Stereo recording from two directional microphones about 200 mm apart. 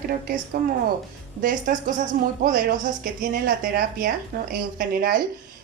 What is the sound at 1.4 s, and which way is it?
A woman's voice, 40° right (ahead or behind).